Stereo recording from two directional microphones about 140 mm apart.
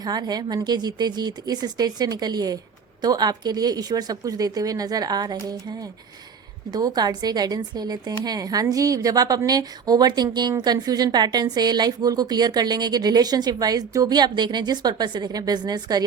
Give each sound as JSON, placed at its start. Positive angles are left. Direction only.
{"t": 0.0, "sound": "speech", "side_deg": -30}
{"t": 6.7, "sound": "speech", "side_deg": -30}